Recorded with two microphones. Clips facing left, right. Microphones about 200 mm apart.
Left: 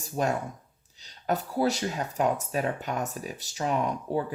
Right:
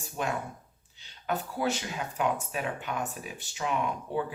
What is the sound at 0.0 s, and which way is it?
Speech, 40° left (ahead or behind).